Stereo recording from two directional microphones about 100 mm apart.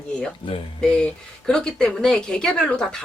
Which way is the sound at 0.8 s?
10° left (ahead or behind).